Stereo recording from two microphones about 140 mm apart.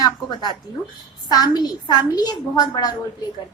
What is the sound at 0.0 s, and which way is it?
A woman's voice, 30° left (ahead or behind).